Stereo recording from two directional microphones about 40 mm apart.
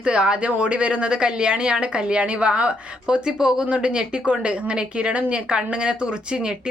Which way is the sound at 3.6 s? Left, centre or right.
Right.